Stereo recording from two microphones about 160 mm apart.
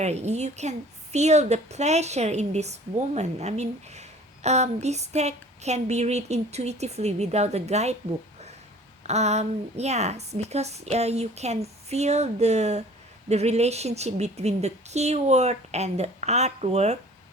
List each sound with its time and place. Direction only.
0.0 s a woman's voice: 45° right (ahead or behind)
9.0 s a woman's voice: 45° right (ahead or behind)